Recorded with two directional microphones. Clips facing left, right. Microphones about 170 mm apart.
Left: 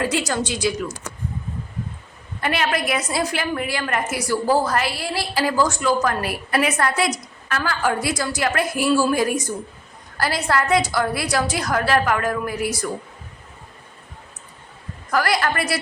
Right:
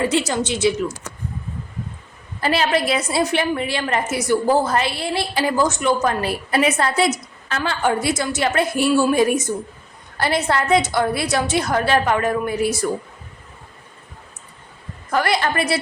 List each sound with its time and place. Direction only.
0.0 s a woman's voice: 25° right (ahead or behind)
2.4 s a woman's voice: 30° right (ahead or behind)
15.1 s a woman's voice: 25° right (ahead or behind)